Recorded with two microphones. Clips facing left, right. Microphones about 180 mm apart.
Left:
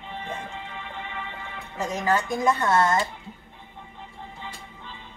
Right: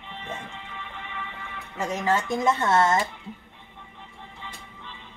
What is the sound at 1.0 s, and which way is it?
Music, 30° left (ahead or behind).